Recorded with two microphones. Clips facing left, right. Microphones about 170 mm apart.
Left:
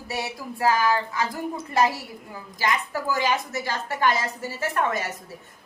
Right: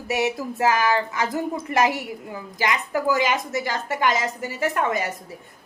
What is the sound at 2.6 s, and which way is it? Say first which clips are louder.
A woman's voice: right 2 dB; 20° right (ahead or behind).